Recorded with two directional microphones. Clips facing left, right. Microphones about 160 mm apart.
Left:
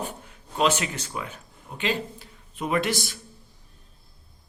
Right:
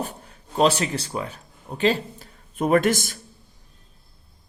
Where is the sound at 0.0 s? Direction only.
40° right (ahead or behind).